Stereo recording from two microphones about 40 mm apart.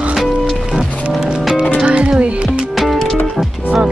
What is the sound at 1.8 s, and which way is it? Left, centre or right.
Music, right.